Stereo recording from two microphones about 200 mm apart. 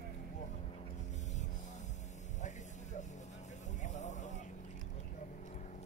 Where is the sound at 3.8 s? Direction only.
35° left (ahead or behind).